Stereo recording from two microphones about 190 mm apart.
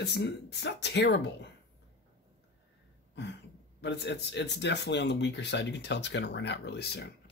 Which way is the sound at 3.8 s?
65° left (ahead or behind).